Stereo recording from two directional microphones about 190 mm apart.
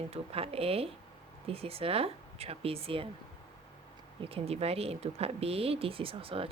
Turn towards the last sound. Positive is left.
turn(degrees=-30)  # may be behind; listen again after turning